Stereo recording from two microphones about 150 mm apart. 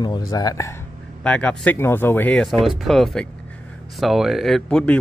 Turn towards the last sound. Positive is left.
turn(degrees=5)  # may be behind; listen again after turning